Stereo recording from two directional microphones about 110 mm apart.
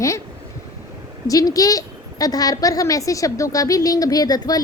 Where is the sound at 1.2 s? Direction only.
35° left (ahead or behind).